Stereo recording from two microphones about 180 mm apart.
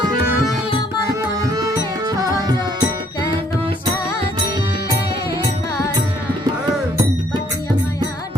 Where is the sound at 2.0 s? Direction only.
20° right (ahead or behind).